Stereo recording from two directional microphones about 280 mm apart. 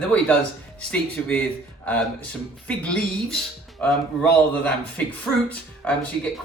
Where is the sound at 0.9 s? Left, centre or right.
Centre.